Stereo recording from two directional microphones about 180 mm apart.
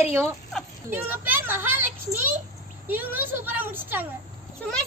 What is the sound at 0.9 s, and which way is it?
A child's voice, 10° right (ahead or behind).